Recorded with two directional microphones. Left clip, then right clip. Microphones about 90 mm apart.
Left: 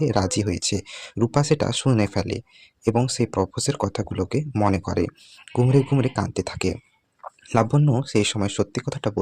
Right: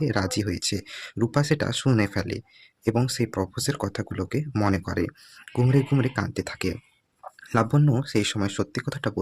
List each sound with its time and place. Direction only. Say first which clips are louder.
0.0 s speech: left 4 dB; 30° left (ahead or behind)